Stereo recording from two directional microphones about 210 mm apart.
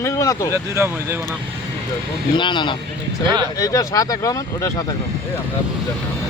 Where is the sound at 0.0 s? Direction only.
15° left (ahead or behind).